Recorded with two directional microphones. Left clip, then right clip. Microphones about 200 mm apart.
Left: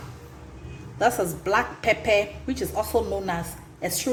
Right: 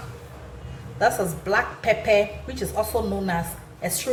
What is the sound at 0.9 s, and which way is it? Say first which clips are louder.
A woman's voice: right 1 dB; 40° left (ahead or behind).